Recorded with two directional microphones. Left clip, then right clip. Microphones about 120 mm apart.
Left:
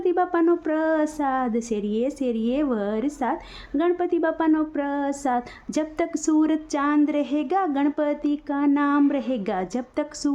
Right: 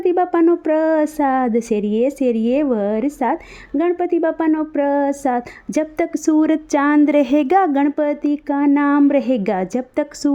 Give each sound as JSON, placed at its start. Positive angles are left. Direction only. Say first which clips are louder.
{"t": 0.0, "sound": "speech", "louder": "right 6 dB", "side_deg": -45}